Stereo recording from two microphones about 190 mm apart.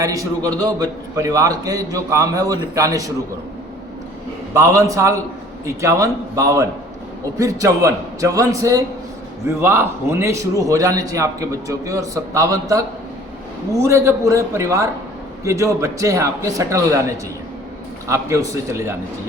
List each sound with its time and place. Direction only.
0.0 s a man's voice: 20° right (ahead or behind)
4.5 s a man's voice: 15° right (ahead or behind)
18.1 s a man's voice: 15° right (ahead or behind)